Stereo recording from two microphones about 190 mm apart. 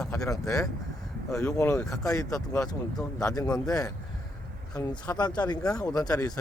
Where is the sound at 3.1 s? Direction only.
20° left (ahead or behind).